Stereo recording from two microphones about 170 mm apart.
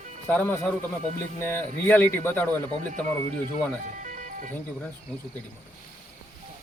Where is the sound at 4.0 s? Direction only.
45° right (ahead or behind).